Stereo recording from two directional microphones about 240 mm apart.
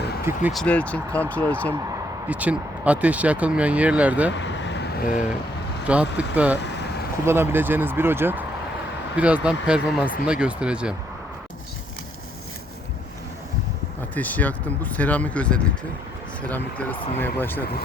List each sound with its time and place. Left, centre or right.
0.3 s speech: centre
1.7 s speech: centre
4.3 s vehicle: left
5.8 s speech: centre
14.2 s speech: centre